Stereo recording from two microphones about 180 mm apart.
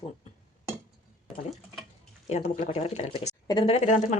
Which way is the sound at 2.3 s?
35° left (ahead or behind).